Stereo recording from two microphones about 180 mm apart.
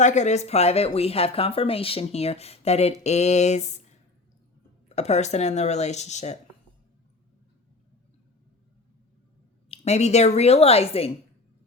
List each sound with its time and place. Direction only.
0.0 s speech: 40° left (ahead or behind)
9.6 s speech: 35° left (ahead or behind)